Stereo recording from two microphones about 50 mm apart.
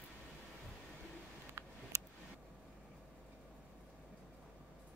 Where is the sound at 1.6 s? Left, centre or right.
Right.